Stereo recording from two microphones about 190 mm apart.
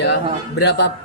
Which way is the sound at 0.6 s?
65° left (ahead or behind).